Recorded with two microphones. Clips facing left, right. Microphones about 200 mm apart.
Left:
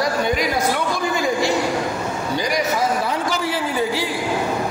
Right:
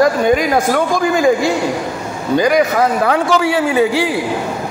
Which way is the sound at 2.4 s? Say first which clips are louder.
Right 9 dB; 60° right (ahead or behind).